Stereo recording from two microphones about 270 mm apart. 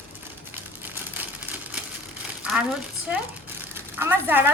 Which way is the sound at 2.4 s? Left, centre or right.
Centre.